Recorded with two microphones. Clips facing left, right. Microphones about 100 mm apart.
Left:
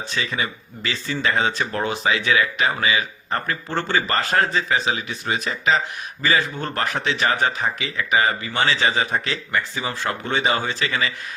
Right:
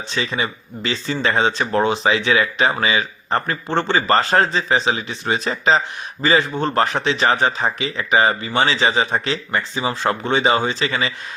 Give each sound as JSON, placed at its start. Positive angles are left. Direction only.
{"t": 0.1, "sound": "speech", "side_deg": -25}